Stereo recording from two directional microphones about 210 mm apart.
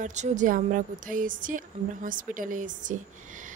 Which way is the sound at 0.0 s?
35° right (ahead or behind).